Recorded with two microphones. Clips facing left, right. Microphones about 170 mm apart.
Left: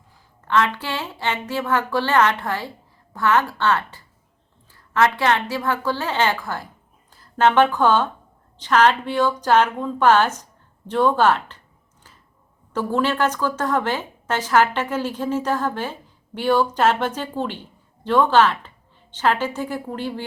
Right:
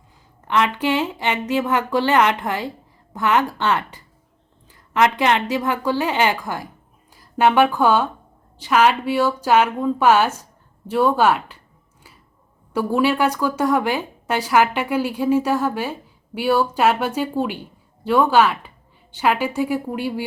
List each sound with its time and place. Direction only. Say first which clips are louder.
0.4 s speech: right 2 dB; 15° right (ahead or behind)
12.7 s speech: right 3 dB; 10° right (ahead or behind)